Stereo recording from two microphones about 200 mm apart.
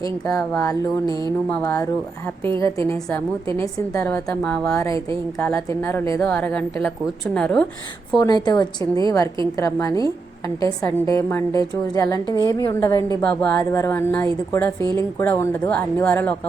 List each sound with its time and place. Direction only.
1.5 s a woman's voice: 15° left (ahead or behind)
8.2 s a woman's voice: 20° left (ahead or behind)
13.2 s a woman's voice: 5° left (ahead or behind)